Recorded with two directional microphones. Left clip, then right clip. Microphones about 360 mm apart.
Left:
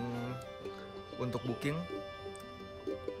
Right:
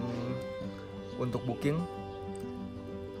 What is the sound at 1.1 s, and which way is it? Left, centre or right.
Speech, centre.